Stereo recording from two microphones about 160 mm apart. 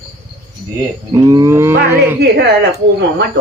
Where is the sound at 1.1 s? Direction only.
20° right (ahead or behind).